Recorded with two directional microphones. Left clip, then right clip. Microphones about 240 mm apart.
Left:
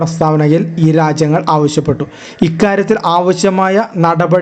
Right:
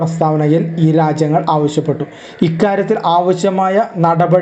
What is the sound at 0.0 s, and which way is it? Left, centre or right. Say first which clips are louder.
Speech: left 2 dB; left.